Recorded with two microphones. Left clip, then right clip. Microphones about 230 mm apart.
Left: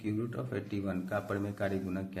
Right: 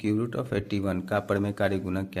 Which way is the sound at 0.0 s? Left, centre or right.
Right.